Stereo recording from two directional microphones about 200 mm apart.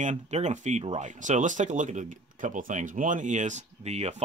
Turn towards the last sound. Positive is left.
turn(degrees=-35)  # may be behind; listen again after turning